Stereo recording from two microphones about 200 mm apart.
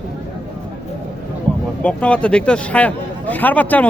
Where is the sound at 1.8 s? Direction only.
5° left (ahead or behind).